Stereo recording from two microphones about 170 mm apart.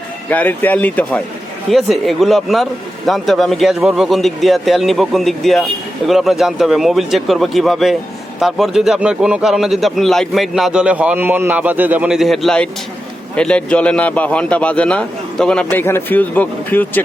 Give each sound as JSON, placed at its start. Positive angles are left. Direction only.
{"t": 0.3, "sound": "a man's voice", "side_deg": 10}